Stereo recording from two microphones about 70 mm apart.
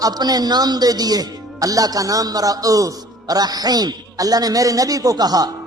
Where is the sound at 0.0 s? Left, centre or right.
Right.